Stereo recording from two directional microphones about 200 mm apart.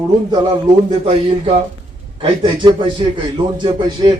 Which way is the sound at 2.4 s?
25° right (ahead or behind).